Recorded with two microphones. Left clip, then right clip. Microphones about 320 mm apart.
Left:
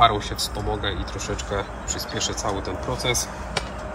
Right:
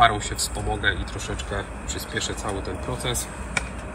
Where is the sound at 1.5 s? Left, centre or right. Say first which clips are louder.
Left 3 dB; centre.